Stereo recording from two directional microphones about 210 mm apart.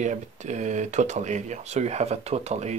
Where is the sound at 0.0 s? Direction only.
35° right (ahead or behind).